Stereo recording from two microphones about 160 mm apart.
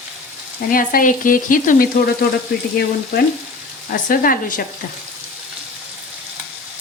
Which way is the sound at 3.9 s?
60° left (ahead or behind).